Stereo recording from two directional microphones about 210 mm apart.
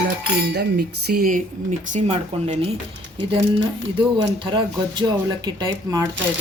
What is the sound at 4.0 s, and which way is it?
Speech, 25° right (ahead or behind).